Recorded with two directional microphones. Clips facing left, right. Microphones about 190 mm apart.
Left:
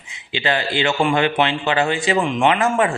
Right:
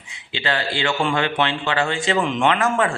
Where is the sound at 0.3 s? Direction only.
15° left (ahead or behind).